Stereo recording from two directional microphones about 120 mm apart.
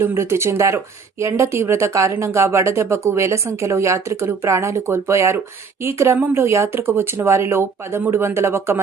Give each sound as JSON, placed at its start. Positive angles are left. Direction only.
{"t": 0.0, "sound": "speech", "side_deg": -20}